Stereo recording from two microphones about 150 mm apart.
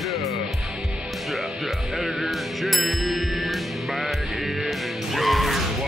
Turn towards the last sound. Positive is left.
turn(degrees=0)  # may be behind; listen again after turning